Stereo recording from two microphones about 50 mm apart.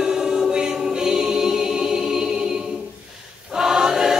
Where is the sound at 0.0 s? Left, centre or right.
Centre.